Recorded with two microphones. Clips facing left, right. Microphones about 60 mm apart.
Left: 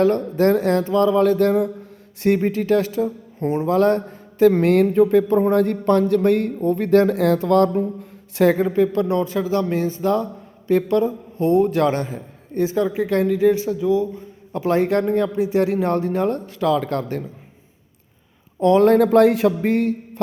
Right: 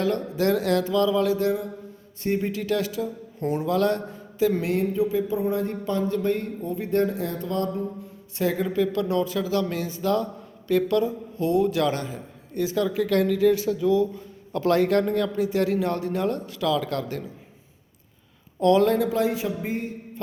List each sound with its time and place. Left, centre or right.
0.0 s a man's voice: left
2.4 s a man's voice: left
8.5 s a man's voice: left
18.6 s speech: left
18.9 s a man's voice: left